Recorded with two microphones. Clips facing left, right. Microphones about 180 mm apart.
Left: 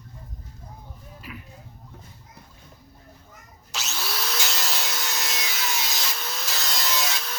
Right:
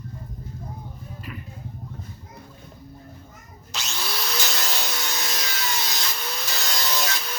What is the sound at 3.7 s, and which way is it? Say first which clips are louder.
Wood: right 1 dB; 5° left (ahead or behind).